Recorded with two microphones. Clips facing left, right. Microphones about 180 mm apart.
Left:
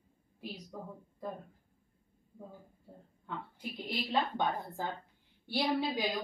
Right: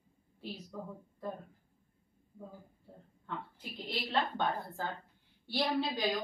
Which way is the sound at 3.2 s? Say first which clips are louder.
Left 1 dB; 10° left (ahead or behind).